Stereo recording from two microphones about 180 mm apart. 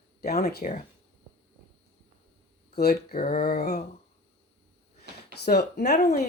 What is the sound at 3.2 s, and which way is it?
Speech, 50° left (ahead or behind).